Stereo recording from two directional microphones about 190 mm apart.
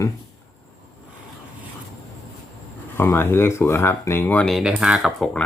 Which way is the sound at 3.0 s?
10° left (ahead or behind).